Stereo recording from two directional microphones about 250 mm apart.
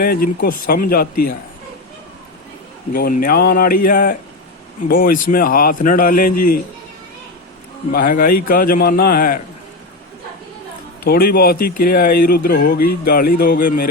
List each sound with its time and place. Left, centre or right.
0.0 s a man's voice: left
2.9 s a man's voice: left
7.9 s a man's voice: left
11.0 s a man's voice: left